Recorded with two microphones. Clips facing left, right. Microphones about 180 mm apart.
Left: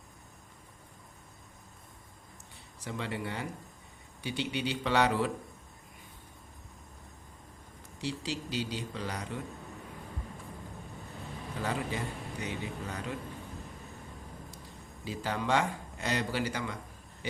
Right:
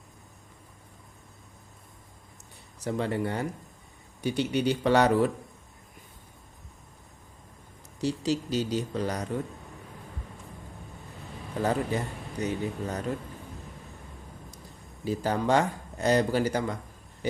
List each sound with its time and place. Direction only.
2.8 s a man's voice: 45° right (ahead or behind)
8.0 s a man's voice: 45° right (ahead or behind)
11.6 s a man's voice: 40° right (ahead or behind)
15.0 s speech: 40° right (ahead or behind)